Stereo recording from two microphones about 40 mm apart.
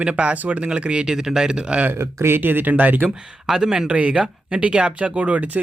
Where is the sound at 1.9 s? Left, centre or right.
Right.